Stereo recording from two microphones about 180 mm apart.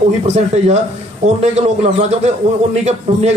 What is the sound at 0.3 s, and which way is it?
A man's voice, 40° right (ahead or behind).